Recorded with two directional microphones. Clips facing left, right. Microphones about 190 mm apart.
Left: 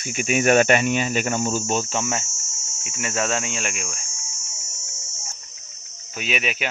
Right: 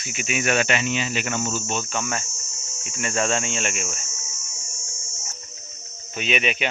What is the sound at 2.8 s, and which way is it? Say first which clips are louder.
Speech: right 1 dB; 5° left (ahead or behind).